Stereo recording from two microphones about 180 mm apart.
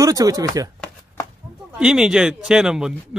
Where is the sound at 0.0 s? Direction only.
20° right (ahead or behind).